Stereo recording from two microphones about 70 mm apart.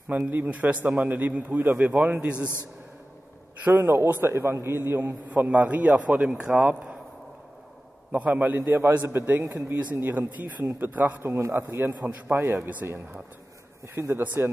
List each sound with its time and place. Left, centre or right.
0.3 s a man's voice: right
2.3 s a man's voice: left
3.6 s a man's voice: right
5.3 s a man's voice: right
8.1 s a man's voice: right
8.6 s a man's voice: right
11.2 s a man's voice: right
11.6 s a man's voice: right
12.6 s a man's voice: right
13.9 s a man's voice: right
14.2 s a man's voice: right